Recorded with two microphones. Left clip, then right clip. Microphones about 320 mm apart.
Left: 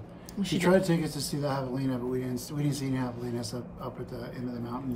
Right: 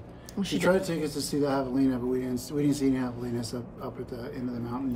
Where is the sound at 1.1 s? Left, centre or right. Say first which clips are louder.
Right 4 dB; centre.